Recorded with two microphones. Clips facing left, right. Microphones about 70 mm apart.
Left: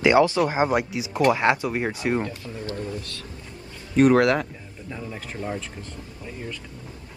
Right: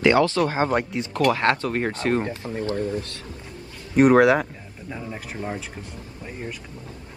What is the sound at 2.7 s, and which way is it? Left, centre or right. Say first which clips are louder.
Speech: right 5 dB; right.